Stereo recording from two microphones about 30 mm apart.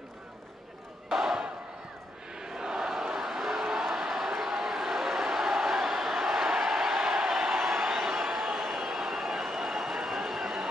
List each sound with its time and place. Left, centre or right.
1.0 s battle cry: centre
2.5 s a sound: right
6.9 s crowd: centre